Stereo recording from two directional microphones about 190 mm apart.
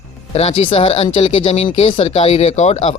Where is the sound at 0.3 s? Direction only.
30° left (ahead or behind).